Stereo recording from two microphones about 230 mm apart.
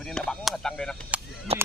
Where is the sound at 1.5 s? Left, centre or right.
Right.